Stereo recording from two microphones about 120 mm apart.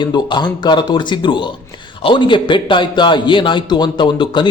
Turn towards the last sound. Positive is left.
turn(degrees=40)  # may be behind; listen again after turning